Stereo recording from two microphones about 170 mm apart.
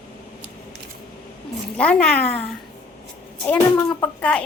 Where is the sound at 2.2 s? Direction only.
40° left (ahead or behind).